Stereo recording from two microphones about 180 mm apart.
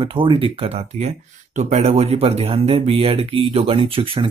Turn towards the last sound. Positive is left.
turn(degrees=-30)  # may be behind; listen again after turning